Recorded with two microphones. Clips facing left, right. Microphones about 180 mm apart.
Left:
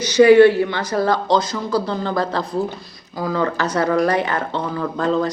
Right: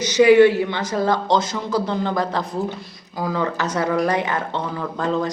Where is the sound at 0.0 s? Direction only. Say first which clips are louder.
Left 2 dB; 20° right (ahead or behind).